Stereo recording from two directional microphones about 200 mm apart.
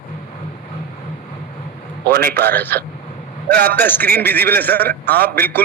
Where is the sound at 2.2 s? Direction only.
50° right (ahead or behind).